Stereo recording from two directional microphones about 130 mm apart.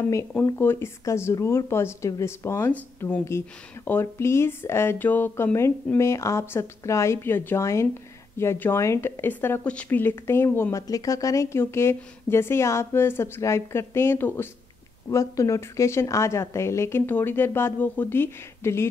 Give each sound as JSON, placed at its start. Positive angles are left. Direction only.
{"t": 0.5, "sound": "speech", "side_deg": 20}